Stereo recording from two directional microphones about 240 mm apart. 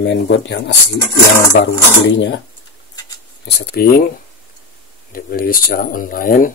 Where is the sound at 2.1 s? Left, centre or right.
Left.